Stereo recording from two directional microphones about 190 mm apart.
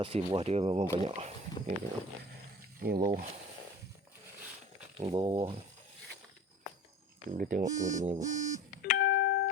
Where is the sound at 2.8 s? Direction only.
50° right (ahead or behind).